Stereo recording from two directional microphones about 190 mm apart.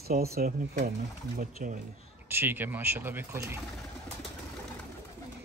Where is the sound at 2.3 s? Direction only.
10° right (ahead or behind).